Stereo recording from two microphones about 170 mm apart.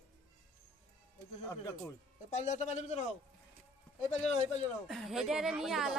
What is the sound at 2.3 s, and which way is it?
Speech, 45° left (ahead or behind).